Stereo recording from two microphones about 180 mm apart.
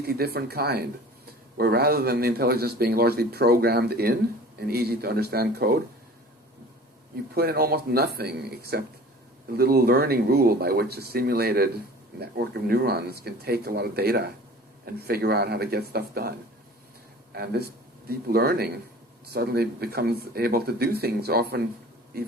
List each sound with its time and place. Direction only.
0.0 s speech: 60° right (ahead or behind)
7.3 s speech: 60° right (ahead or behind)
17.3 s speech: 60° right (ahead or behind)